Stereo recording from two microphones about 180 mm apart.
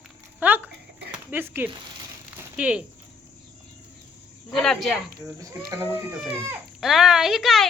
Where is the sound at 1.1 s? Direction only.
10° right (ahead or behind).